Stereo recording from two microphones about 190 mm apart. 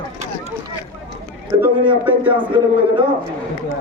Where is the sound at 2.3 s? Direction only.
25° right (ahead or behind).